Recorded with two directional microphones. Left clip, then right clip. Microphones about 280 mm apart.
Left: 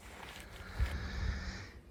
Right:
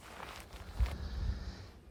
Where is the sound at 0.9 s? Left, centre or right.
Centre.